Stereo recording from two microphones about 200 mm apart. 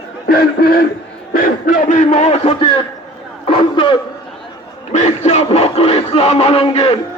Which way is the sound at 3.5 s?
25° left (ahead or behind).